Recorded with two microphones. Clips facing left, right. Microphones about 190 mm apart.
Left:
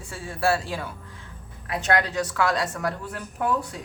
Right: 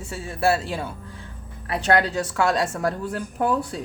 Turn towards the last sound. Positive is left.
turn(degrees=-35)  # may be behind; listen again after turning